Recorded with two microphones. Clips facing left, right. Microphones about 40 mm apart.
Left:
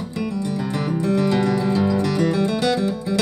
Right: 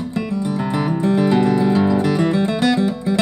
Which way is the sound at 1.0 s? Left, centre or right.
Right.